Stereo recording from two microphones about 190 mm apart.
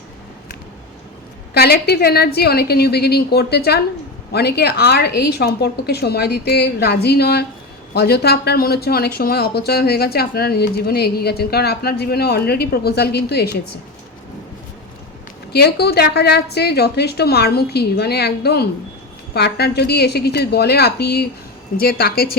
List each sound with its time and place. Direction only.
1.5 s speech: 55° left (ahead or behind)
15.5 s a woman's voice: 55° left (ahead or behind)